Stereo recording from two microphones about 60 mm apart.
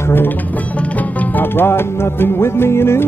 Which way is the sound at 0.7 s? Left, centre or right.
Left.